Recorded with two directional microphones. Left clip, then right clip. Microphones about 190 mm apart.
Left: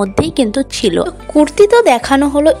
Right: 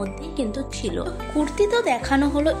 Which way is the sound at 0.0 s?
55° left (ahead or behind).